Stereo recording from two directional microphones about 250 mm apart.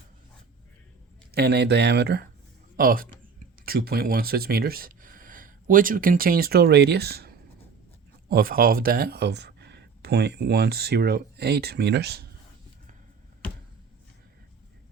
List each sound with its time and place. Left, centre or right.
1.3 s speech: right